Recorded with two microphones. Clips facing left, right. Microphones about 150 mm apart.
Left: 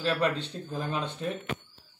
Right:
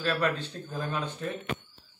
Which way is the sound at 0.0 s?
20° left (ahead or behind).